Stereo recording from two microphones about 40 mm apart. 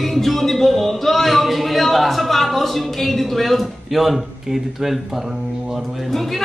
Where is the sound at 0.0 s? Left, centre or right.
Centre.